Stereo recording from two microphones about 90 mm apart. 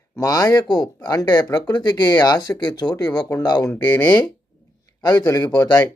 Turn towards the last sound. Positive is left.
turn(degrees=45)  # may be behind; listen again after turning